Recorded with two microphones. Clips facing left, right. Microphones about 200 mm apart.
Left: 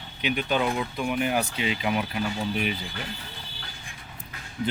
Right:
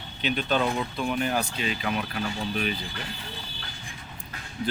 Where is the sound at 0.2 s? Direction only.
10° left (ahead or behind).